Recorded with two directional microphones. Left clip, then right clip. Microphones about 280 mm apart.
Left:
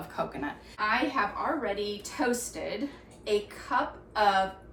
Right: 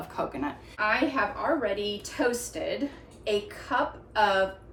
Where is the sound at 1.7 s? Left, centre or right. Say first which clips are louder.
Right 2 dB; right.